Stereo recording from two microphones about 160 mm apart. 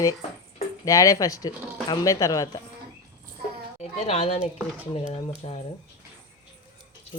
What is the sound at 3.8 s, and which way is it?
Speech, 40° left (ahead or behind).